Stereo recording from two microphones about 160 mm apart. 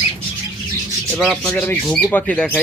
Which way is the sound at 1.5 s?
10° left (ahead or behind).